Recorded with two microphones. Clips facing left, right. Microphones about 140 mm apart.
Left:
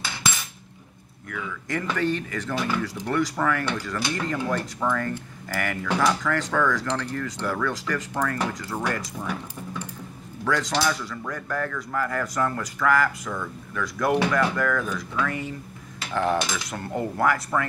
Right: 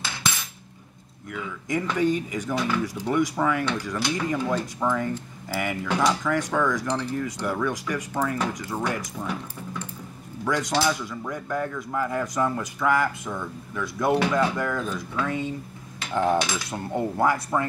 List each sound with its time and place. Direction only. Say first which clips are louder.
1.3 s speech: right 2 dB; 15° right (ahead or behind)
2.5 s speech: right 1 dB; centre (ahead or behind)
2.8 s speech: right 1 dB; 15° right (ahead or behind)
10.4 s speech: even; 15° right (ahead or behind)
14.3 s cutlery: left 1 dB; 20° right (ahead or behind)
16.1 s speech: right 1 dB; 15° right (ahead or behind)
16.5 s cutlery: right 1 dB; 15° right (ahead or behind)